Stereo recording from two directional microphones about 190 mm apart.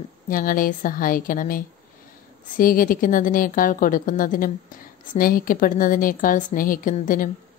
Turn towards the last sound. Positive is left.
turn(degrees=45)  # may be behind; listen again after turning